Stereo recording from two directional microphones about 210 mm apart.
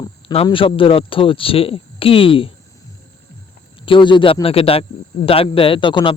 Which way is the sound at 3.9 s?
20° left (ahead or behind).